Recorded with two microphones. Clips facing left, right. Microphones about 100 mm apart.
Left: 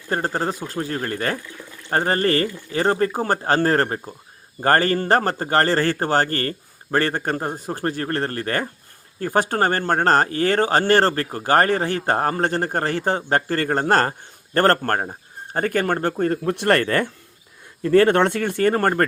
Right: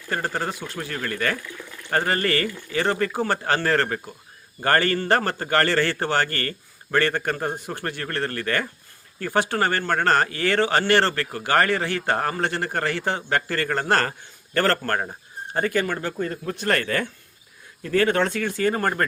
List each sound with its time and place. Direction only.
0.3 s speech: 35° left (ahead or behind)